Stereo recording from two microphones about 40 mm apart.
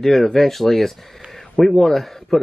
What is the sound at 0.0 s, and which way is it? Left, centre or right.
Speech, centre.